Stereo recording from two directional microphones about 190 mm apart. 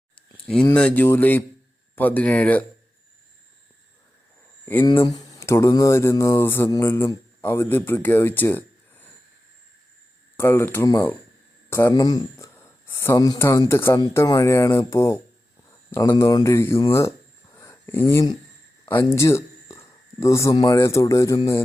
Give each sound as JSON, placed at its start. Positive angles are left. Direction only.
{"t": 0.3, "sound": "a sound", "side_deg": 5}
{"t": 0.7, "sound": "speech", "side_deg": 5}
{"t": 4.6, "sound": "speech", "side_deg": 10}
{"t": 10.3, "sound": "speech", "side_deg": 10}
{"t": 16.9, "sound": "a sound", "side_deg": 15}
{"t": 18.1, "sound": "speech", "side_deg": 15}